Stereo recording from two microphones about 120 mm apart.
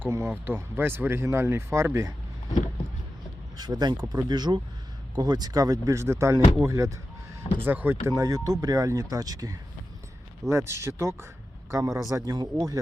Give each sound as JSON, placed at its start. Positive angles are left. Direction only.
{"t": 0.0, "sound": "speech", "side_deg": -20}
{"t": 3.6, "sound": "speech", "side_deg": -35}
{"t": 8.0, "sound": "speech", "side_deg": -30}